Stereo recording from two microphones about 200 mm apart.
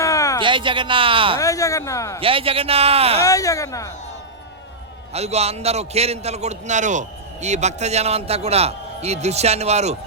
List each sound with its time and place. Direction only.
0.0 s a sound: 15° left (ahead or behind)
0.4 s a man's voice: 25° right (ahead or behind)
1.4 s speech: 15° left (ahead or behind)
2.2 s a man's voice: 25° right (ahead or behind)
3.2 s speech: 15° left (ahead or behind)
5.1 s a man's voice: 30° right (ahead or behind)